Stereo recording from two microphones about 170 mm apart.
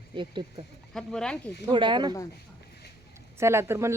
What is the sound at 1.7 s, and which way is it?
Speech, 30° right (ahead or behind).